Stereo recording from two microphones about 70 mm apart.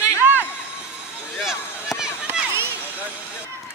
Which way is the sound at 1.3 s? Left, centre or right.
Centre.